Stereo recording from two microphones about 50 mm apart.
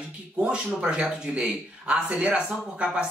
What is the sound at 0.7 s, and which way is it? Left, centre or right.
Speech, right.